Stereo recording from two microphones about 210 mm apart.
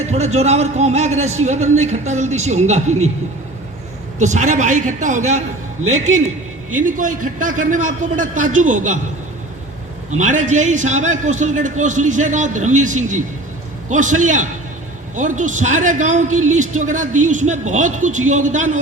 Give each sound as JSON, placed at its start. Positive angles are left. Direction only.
{"t": 0.3, "sound": "a man's voice", "side_deg": -30}
{"t": 4.2, "sound": "a man's voice", "side_deg": -35}
{"t": 6.7, "sound": "a man's voice", "side_deg": -40}
{"t": 10.1, "sound": "a man's voice", "side_deg": -35}